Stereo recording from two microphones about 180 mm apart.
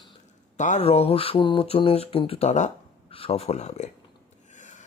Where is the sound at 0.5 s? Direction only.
40° left (ahead or behind).